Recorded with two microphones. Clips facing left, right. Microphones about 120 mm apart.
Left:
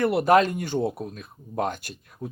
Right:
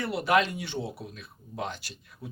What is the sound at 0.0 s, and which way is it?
Speech, 60° left (ahead or behind).